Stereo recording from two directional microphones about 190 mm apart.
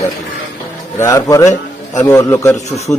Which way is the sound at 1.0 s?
15° left (ahead or behind).